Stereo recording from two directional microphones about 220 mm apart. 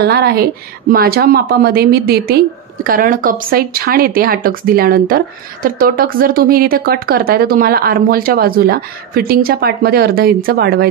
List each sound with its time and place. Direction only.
0.0 s a woman's voice: 45° right (ahead or behind)